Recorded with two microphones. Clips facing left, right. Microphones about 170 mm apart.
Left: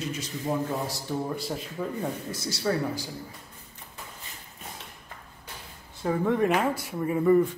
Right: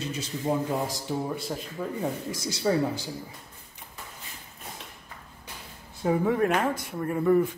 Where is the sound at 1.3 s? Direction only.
Centre (ahead or behind).